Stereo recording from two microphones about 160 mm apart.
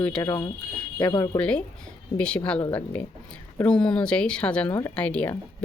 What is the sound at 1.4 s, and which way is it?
Speech, 5° left (ahead or behind).